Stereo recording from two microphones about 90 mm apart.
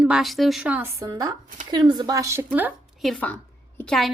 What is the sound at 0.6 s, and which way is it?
Speech, 15° right (ahead or behind).